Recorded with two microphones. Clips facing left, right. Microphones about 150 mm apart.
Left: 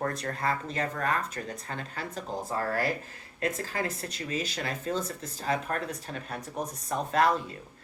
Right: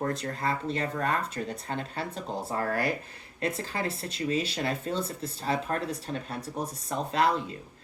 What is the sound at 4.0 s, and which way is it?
Speech, 25° right (ahead or behind).